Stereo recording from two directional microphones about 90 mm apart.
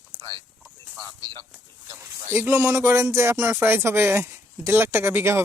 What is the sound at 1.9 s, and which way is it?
Speech, 30° right (ahead or behind).